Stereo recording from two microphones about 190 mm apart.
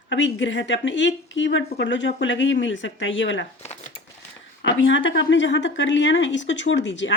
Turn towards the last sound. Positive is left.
turn(degrees=75)  # may be behind; listen again after turning